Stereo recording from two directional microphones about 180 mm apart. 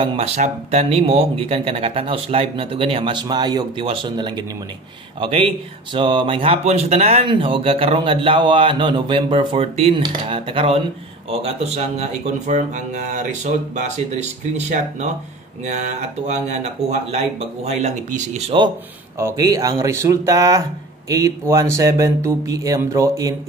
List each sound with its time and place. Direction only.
0.0 s speech: 30° right (ahead or behind)
19.1 s speech: 15° right (ahead or behind)